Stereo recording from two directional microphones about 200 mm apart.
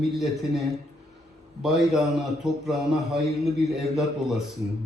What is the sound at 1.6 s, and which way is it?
A man's voice, centre (ahead or behind).